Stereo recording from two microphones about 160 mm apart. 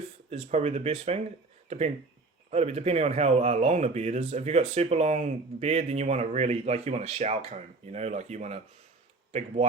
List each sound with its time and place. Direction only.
0.3 s speech: 40° right (ahead or behind)
2.5 s speech: 40° right (ahead or behind)